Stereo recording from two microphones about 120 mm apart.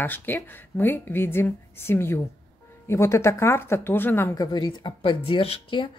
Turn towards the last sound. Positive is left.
turn(degrees=45)  # may be behind; listen again after turning